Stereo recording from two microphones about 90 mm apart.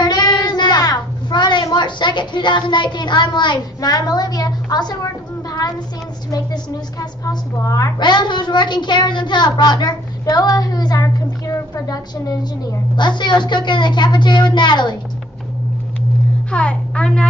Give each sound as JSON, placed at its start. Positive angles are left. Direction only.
{"t": 0.0, "sound": "child singing", "side_deg": 55}
{"t": 6.3, "sound": "a woman's voice", "side_deg": 45}
{"t": 8.0, "sound": "speech", "side_deg": 55}
{"t": 16.4, "sound": "a child's voice", "side_deg": 10}